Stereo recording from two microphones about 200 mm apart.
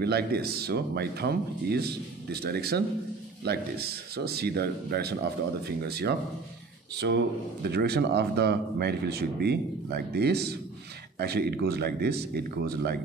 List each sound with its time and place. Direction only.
0.0 s a man's voice: 50° right (ahead or behind)